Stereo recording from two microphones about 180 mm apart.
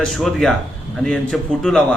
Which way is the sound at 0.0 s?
Centre (ahead or behind).